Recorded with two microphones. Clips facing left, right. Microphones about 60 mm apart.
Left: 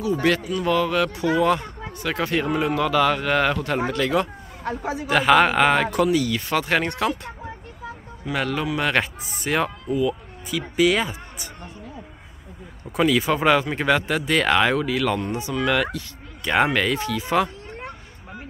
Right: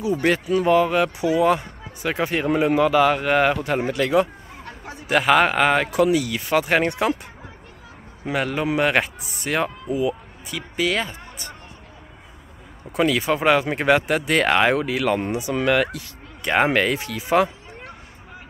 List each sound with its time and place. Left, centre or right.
0.2 s speech: right
8.3 s speech: centre
9.0 s speech: centre
12.9 s speech: centre